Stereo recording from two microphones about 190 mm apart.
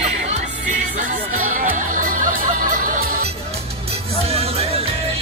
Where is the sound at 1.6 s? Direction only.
45° right (ahead or behind).